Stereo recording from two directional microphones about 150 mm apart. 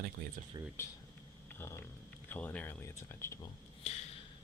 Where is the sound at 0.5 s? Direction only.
25° right (ahead or behind).